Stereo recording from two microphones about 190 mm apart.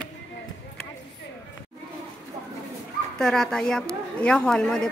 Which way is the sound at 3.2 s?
5° left (ahead or behind).